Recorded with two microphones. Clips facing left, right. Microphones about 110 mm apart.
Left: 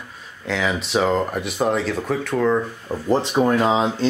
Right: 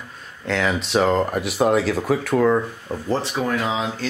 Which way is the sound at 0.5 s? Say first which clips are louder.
Right 1 dB; centre (ahead or behind).